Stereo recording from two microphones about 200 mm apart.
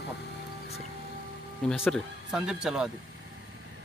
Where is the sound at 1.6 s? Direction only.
5° left (ahead or behind).